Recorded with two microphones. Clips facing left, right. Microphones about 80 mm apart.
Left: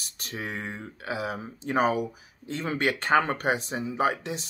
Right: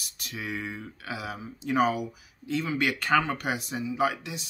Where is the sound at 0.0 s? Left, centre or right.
Left.